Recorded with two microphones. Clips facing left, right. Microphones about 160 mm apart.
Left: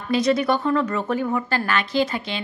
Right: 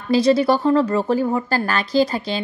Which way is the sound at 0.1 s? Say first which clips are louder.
Right 4 dB; 30° right (ahead or behind).